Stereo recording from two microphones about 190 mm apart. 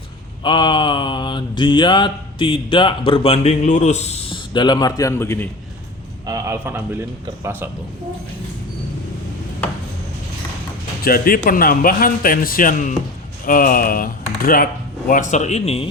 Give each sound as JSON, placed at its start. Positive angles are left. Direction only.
{"t": 0.4, "sound": "mantra", "side_deg": 25}
{"t": 6.2, "sound": "a man's voice", "side_deg": -15}
{"t": 11.0, "sound": "speech", "side_deg": 50}